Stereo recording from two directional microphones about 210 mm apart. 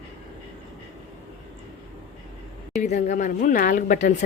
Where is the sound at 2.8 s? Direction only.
35° left (ahead or behind).